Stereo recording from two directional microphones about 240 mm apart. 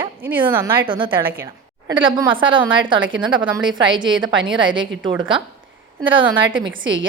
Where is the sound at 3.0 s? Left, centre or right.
Right.